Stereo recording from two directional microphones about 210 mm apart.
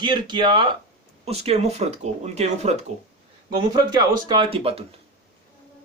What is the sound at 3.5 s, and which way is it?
Speech, 20° right (ahead or behind).